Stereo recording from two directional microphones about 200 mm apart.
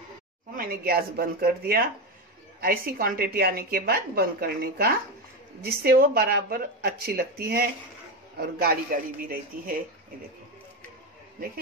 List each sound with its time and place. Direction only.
0.6 s a woman's voice: 50° right (ahead or behind)